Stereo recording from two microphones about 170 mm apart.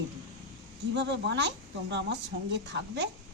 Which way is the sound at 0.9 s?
90° right.